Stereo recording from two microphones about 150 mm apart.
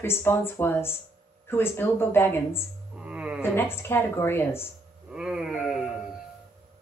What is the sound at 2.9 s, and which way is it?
Music, 10° right (ahead or behind).